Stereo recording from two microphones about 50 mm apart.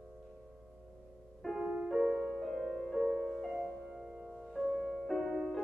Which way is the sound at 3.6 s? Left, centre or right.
Centre.